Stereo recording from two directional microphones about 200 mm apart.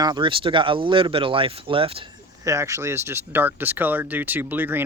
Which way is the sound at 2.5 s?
15° right (ahead or behind).